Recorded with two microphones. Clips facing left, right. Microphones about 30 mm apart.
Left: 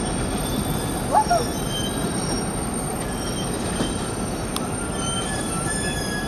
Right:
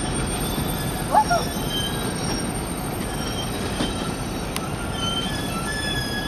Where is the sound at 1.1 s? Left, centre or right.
Centre.